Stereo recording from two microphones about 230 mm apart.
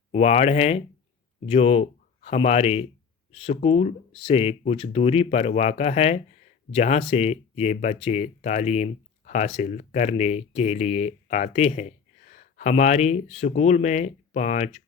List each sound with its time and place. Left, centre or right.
0.1 s speech: left